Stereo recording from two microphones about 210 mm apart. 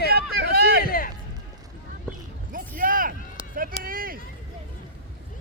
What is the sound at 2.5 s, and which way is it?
Vehicle, 40° right (ahead or behind).